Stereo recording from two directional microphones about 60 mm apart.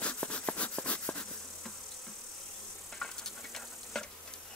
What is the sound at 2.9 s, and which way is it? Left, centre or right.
Insect, centre.